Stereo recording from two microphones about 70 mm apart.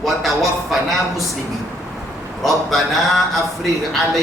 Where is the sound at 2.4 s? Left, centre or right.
Centre.